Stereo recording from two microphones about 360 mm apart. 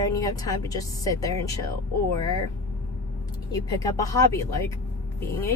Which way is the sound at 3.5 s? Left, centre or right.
Centre.